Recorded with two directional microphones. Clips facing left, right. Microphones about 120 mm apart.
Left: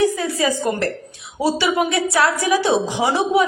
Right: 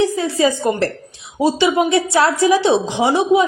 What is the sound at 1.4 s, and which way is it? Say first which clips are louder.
Speech: right 3 dB; 20° right (ahead or behind).